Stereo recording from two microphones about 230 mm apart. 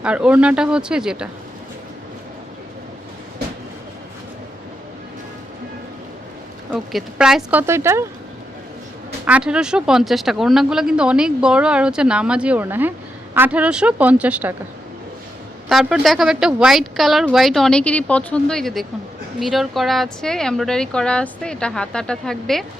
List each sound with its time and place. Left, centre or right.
0.0 s speech: centre
6.7 s speech: centre
9.2 s speech: centre
15.7 s speech: centre